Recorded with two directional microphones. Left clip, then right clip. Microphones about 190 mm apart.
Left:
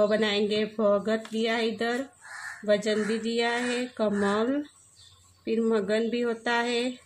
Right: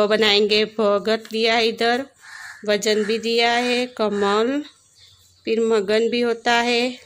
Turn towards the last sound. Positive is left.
turn(degrees=-50)  # may be behind; listen again after turning